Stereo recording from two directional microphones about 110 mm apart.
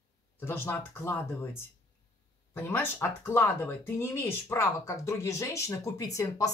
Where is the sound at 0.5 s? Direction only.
20° left (ahead or behind).